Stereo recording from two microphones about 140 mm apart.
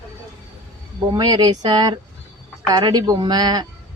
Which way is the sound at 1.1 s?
30° right (ahead or behind).